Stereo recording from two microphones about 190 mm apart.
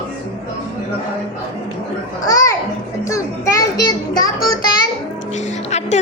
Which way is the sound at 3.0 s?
15° left (ahead or behind).